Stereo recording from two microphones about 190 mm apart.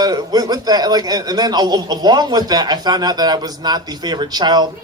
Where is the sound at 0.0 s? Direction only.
20° right (ahead or behind).